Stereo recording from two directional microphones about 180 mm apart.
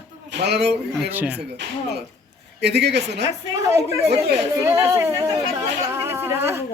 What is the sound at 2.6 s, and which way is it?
Speech, 70° right (ahead or behind).